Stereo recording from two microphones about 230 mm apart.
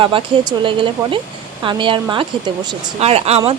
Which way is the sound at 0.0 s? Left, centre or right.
Right.